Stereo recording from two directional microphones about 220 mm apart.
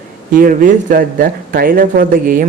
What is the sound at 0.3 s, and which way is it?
Speech, 35° right (ahead or behind).